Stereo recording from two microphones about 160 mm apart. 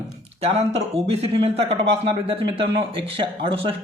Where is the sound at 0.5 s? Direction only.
40° right (ahead or behind).